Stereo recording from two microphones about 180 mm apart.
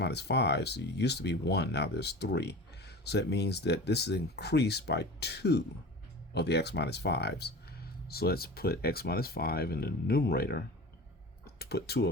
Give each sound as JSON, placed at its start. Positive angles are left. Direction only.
{"t": 0.0, "sound": "speech", "side_deg": 65}